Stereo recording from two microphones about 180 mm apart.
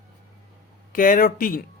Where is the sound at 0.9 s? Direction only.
50° left (ahead or behind).